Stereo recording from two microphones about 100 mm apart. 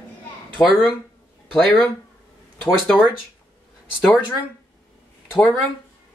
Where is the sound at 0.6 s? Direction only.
30° left (ahead or behind).